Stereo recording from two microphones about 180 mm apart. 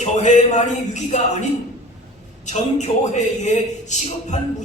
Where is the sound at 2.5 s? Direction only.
40° left (ahead or behind).